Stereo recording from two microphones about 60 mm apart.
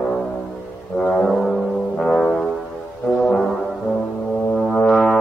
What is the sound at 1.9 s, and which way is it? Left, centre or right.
Brass instrument, centre.